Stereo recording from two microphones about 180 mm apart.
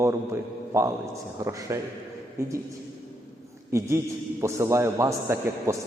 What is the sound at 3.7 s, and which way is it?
A man's voice, 15° right (ahead or behind).